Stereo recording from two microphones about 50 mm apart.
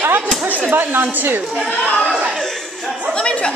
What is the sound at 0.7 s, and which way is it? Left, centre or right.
Speech, right.